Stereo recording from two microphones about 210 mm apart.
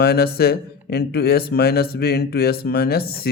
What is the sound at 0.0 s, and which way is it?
Speech, 50° left (ahead or behind).